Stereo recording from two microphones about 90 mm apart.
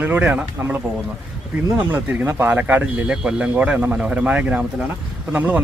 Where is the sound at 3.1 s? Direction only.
10° right (ahead or behind).